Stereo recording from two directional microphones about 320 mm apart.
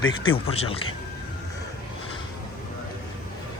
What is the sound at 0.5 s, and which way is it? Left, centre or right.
Speech, centre.